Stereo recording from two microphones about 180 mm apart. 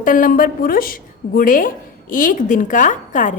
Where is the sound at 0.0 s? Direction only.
50° left (ahead or behind).